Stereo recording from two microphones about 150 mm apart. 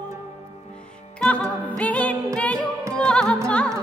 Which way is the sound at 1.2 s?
10° left (ahead or behind).